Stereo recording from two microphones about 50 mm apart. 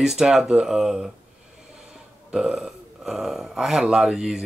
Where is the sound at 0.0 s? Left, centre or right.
Centre.